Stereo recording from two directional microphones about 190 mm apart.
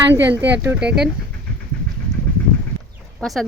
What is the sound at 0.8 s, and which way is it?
Speech, 60° right (ahead or behind).